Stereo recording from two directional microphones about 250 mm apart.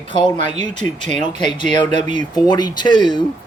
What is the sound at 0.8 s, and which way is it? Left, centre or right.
Speech, centre.